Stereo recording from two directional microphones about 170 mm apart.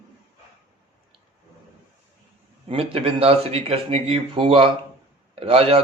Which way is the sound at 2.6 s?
35° right (ahead or behind).